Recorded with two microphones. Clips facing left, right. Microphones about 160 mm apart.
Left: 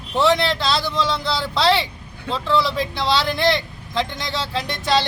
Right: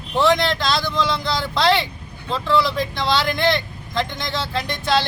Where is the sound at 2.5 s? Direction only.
5° left (ahead or behind).